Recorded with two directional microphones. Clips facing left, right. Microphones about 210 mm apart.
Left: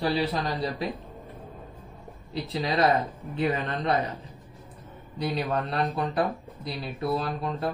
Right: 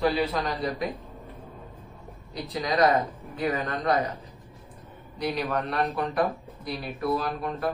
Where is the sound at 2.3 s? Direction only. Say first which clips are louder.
Even; 30° left (ahead or behind).